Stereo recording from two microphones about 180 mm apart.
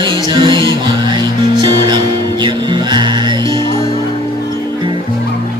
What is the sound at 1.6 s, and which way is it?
Music, 25° right (ahead or behind).